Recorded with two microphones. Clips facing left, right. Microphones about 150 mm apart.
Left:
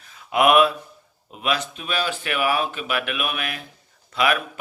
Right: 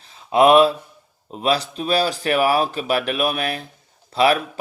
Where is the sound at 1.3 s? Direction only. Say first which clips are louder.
Right 5 dB; 35° right (ahead or behind).